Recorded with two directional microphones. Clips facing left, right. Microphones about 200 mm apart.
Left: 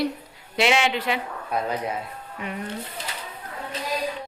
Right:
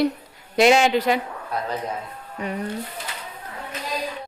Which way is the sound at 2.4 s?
35° right (ahead or behind).